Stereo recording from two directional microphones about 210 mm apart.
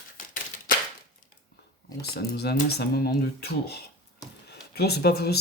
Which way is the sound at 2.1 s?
50° left (ahead or behind).